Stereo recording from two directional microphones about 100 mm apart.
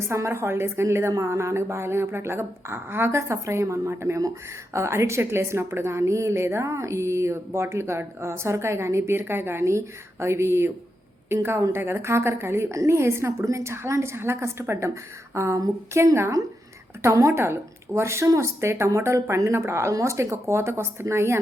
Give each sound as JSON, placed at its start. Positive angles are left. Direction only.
{"t": 0.1, "sound": "a woman's voice", "side_deg": -25}